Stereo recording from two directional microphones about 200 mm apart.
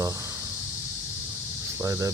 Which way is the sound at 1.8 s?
15° right (ahead or behind).